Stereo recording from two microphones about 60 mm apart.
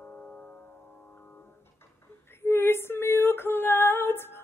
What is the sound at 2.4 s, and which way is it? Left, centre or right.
Female singing, left.